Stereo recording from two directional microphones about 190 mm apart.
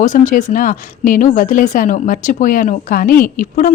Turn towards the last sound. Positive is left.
turn(degrees=45)  # may be behind; listen again after turning